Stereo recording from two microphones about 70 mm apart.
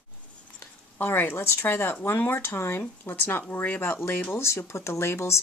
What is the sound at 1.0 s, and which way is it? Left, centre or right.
Speech, left.